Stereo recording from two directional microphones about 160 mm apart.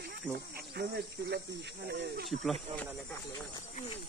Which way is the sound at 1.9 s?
85° right.